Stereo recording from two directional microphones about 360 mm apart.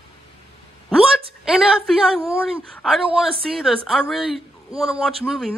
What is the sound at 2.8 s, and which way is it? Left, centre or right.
A man's voice, centre.